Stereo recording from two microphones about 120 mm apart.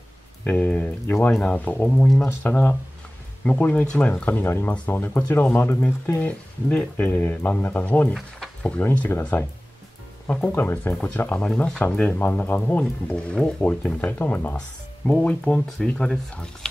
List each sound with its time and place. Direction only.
0.4 s speech: 10° left (ahead or behind)
2.2 s speech: 20° left (ahead or behind)